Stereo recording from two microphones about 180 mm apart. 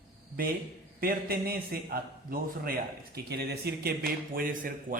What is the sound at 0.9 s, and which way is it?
Speech, 55° right (ahead or behind).